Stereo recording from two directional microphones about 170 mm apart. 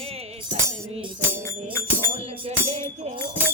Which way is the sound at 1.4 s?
15° left (ahead or behind).